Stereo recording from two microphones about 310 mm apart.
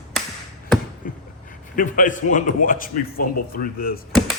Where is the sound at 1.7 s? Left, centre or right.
Left.